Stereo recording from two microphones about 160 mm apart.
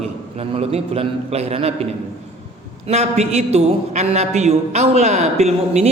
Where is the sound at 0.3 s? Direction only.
40° right (ahead or behind).